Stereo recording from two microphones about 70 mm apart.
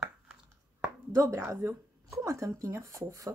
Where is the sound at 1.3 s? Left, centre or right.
Right.